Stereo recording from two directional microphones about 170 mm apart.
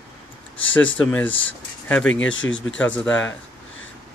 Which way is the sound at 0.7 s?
10° left (ahead or behind).